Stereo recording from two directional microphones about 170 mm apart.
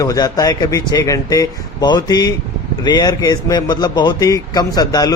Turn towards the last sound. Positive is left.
turn(degrees=25)  # may be behind; listen again after turning